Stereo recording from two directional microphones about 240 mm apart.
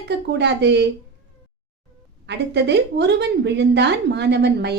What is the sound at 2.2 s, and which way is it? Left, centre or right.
A woman's voice, right.